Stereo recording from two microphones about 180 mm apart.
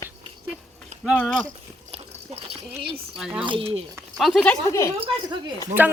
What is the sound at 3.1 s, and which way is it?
Speech, 5° right (ahead or behind).